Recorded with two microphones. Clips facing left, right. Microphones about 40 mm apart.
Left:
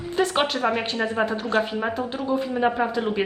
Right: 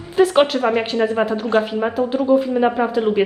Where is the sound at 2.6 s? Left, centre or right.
Centre.